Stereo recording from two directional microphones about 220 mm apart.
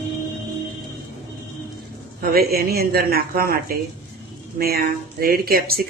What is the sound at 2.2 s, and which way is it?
Speech, 45° right (ahead or behind).